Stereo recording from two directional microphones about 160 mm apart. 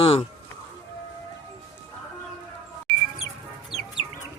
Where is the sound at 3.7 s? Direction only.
Centre (ahead or behind).